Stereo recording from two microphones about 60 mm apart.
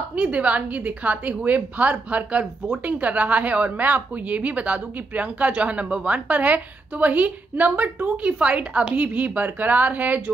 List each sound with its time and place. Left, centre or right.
0.1 s speech: right